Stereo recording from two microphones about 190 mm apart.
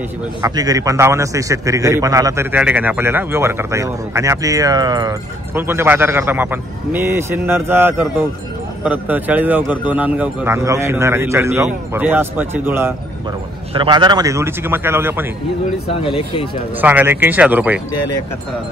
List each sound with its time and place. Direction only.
0.4 s a man's voice: 20° right (ahead or behind)
13.7 s a man's voice: 25° right (ahead or behind)
16.0 s speech: 30° left (ahead or behind)
16.8 s a man's voice: 10° right (ahead or behind)